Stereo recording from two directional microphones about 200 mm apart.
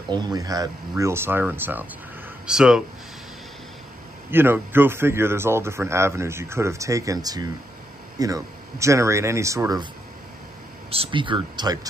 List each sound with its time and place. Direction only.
0.1 s a man's voice: 20° right (ahead or behind)
4.3 s a man's voice: 10° right (ahead or behind)
10.9 s speech: 25° right (ahead or behind)